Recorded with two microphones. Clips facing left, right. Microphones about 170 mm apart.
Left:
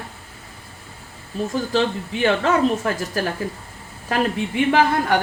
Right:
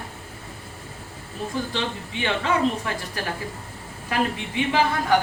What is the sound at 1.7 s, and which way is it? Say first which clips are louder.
Speech: left 8 dB; 45° left (ahead or behind).